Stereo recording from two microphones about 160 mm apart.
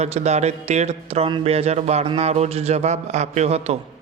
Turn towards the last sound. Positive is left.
turn(degrees=-40)  # may be behind; listen again after turning